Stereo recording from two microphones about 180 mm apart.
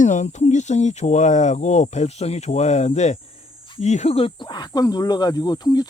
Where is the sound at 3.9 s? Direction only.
40° left (ahead or behind); by 5.8 s 20° left (ahead or behind).